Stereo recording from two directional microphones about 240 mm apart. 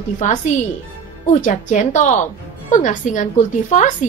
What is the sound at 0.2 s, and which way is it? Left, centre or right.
A woman's voice, left.